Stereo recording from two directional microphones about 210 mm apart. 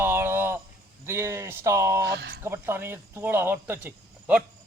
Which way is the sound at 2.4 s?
10° right (ahead or behind).